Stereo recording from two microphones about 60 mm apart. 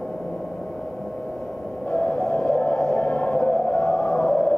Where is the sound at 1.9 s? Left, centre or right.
Left.